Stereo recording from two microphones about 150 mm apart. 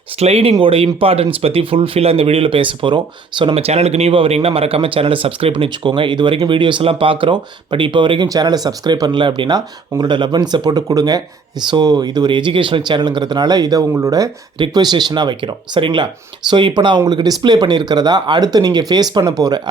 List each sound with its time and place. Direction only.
0.2 s speech: 40° right (ahead or behind); by 19.6 s 25° right (ahead or behind)